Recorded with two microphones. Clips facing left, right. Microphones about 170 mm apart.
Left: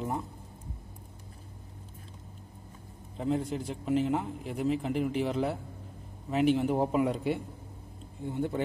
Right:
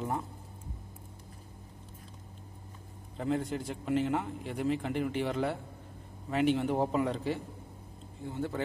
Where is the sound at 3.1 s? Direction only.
Centre (ahead or behind).